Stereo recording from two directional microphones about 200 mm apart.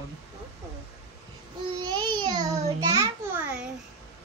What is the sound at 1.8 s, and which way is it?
Child singing, 20° right (ahead or behind).